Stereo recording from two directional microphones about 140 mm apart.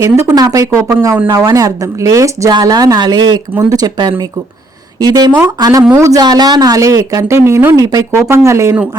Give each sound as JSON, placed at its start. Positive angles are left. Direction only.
{"t": 0.0, "sound": "speech", "side_deg": -25}